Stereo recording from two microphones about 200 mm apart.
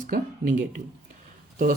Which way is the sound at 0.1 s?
40° right (ahead or behind).